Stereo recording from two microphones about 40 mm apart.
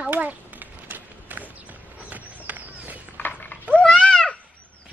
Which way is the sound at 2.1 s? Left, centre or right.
Right.